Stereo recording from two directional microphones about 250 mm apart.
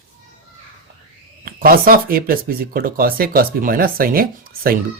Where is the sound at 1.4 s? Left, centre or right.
Right.